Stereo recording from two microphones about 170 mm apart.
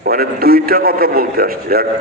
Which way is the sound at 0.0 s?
60° right (ahead or behind).